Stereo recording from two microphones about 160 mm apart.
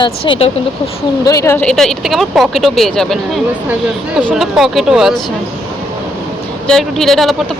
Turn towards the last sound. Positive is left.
turn(degrees=0)  # may be behind; listen again after turning